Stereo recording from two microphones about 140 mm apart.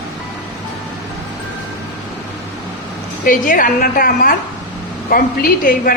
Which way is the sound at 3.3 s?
75° left (ahead or behind).